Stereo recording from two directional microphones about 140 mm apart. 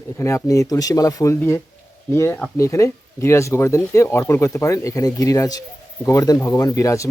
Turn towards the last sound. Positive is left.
turn(degrees=20)  # may be behind; listen again after turning